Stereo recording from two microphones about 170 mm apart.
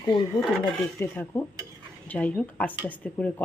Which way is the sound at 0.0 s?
25° left (ahead or behind).